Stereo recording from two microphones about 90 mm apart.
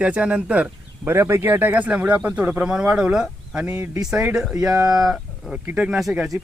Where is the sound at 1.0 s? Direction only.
25° right (ahead or behind); by 5.5 s 5° right (ahead or behind).